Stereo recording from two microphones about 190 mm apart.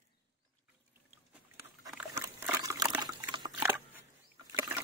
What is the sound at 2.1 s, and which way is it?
Dog, 15° right (ahead or behind).